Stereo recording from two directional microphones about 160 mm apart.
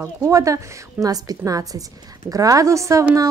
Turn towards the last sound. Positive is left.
turn(degrees=-20)  # may be behind; listen again after turning